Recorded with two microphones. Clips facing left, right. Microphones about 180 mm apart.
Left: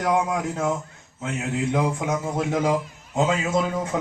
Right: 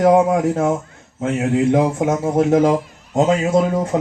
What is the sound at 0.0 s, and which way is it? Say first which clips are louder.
A man's voice: right 9 dB; 50° right (ahead or behind).